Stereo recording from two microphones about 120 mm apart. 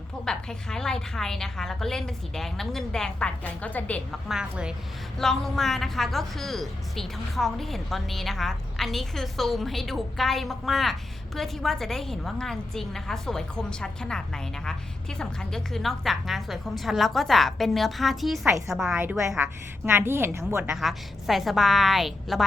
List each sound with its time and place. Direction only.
0.3 s speech: 5° left (ahead or behind)
4.3 s a woman's voice: 5° right (ahead or behind)
19.4 s a woman's voice: 20° right (ahead or behind)
20.7 s speech: centre (ahead or behind)